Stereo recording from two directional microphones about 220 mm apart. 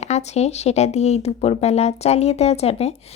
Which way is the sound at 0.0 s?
30° left (ahead or behind).